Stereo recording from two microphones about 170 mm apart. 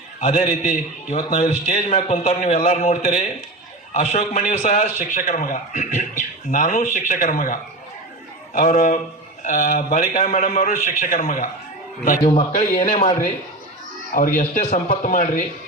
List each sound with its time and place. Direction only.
0.4 s a man's voice: 50° left (ahead or behind)
12.2 s a man's voice: 35° left (ahead or behind)
14.1 s speech: 50° left (ahead or behind)